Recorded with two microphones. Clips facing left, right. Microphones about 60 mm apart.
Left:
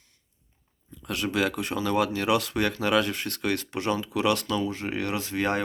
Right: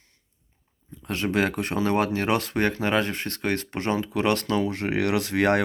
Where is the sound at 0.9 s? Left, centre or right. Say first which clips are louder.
Right 2 dB; right.